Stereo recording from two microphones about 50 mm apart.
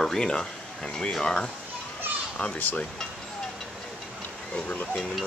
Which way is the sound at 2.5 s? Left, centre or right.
Left.